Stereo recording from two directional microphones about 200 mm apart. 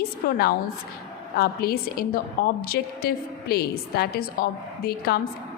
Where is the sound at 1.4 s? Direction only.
50° left (ahead or behind).